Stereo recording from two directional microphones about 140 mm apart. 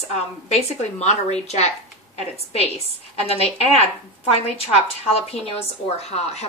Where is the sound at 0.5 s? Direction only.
50° left (ahead or behind).